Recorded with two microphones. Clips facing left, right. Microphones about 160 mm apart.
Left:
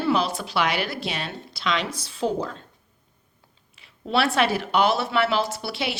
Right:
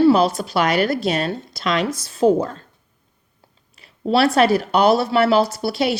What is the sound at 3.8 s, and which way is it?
Speech, 40° right (ahead or behind).